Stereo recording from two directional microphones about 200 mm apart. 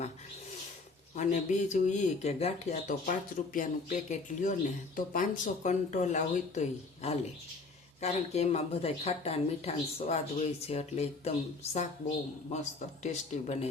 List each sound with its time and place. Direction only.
1.1 s speech: 35° left (ahead or behind)